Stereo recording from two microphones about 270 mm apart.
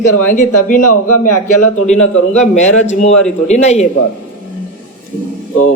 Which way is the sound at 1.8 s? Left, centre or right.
Left.